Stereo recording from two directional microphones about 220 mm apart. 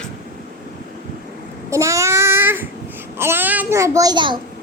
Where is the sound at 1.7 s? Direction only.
15° right (ahead or behind).